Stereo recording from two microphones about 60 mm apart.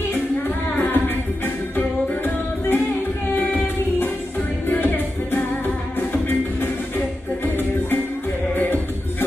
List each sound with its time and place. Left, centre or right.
0.7 s music: left
8.5 s music: left